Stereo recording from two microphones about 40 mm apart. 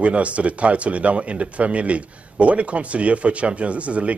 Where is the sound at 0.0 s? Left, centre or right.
Right.